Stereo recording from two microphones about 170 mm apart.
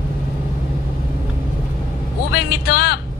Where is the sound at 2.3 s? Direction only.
70° left (ahead or behind).